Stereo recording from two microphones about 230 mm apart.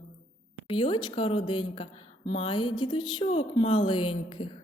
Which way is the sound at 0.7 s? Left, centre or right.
Left.